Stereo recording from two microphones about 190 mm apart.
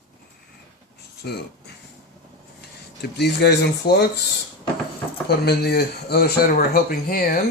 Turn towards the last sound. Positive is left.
turn(degrees=50)  # may be behind; listen again after turning